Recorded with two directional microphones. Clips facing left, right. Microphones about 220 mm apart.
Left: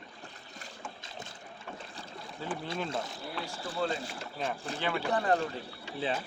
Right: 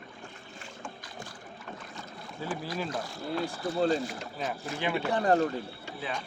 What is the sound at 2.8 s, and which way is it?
Speech, 25° left (ahead or behind).